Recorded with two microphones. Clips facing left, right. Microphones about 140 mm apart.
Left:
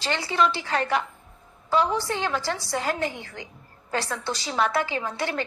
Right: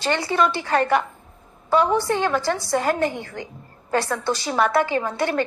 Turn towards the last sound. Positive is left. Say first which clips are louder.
# right 6 dB
turn(degrees=-50)  # may be behind; listen again after turning